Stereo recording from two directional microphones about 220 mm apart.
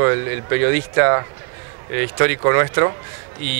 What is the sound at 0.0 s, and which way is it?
Speech, 20° right (ahead or behind).